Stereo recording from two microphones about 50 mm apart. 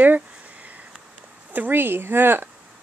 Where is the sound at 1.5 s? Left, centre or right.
Right.